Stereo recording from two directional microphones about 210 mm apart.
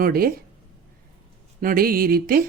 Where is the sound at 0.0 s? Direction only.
45° right (ahead or behind).